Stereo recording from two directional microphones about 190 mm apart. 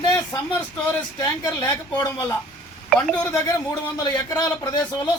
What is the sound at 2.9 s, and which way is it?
Speech, 5° left (ahead or behind).